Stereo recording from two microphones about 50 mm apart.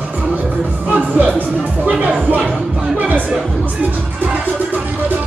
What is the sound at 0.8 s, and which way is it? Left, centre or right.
Music, right.